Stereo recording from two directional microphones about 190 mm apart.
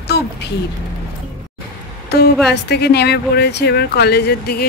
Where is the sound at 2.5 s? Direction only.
60° left (ahead or behind).